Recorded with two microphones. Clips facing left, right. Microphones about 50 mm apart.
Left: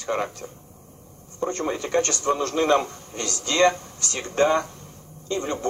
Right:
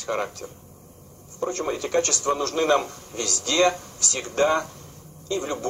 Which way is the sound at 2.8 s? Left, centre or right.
Left.